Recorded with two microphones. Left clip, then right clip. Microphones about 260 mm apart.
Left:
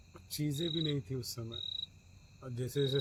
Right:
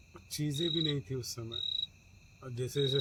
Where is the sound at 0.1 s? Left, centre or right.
Centre.